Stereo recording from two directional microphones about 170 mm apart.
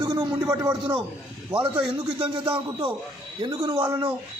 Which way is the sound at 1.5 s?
5° right (ahead or behind).